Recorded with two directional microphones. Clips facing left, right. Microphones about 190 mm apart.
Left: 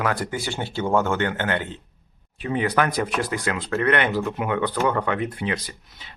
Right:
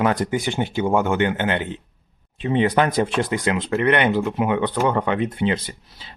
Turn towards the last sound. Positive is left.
turn(degrees=-30)  # may be behind; listen again after turning